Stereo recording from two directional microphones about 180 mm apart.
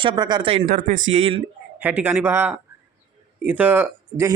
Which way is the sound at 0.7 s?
50° right (ahead or behind).